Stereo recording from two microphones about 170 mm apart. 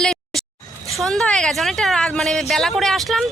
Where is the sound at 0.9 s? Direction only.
Centre (ahead or behind).